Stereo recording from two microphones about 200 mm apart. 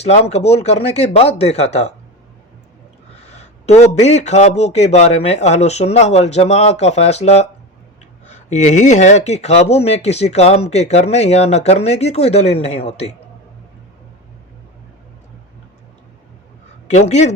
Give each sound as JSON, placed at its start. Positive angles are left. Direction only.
{"t": 0.0, "sound": "speech", "side_deg": 30}
{"t": 3.2, "sound": "speech", "side_deg": 35}
{"t": 16.9, "sound": "speech", "side_deg": 35}